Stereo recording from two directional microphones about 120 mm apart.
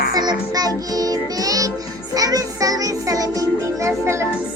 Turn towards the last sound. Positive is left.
turn(degrees=-25)  # may be behind; listen again after turning